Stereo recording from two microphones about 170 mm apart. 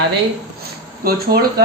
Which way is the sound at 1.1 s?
65° right (ahead or behind).